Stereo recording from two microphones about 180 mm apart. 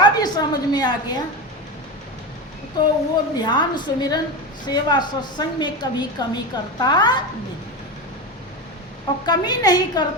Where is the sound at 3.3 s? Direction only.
25° left (ahead or behind).